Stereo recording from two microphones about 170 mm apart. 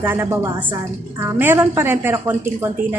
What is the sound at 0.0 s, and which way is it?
A woman's voice, 15° right (ahead or behind).